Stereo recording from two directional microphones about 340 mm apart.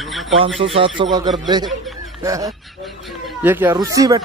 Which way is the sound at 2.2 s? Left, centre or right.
Centre.